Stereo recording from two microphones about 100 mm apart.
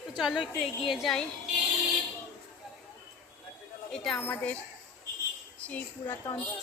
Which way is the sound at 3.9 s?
5° left (ahead or behind).